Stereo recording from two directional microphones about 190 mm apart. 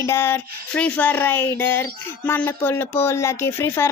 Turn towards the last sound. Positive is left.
turn(degrees=15)  # may be behind; listen again after turning